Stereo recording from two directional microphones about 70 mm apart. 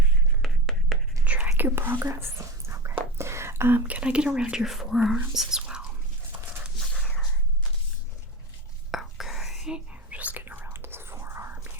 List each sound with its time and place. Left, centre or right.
0.4 s a sound: centre
1.2 s whispering: centre
1.5 s whispering: right
3.8 s speech: centre
8.9 s whispering: centre; by 11.7 s right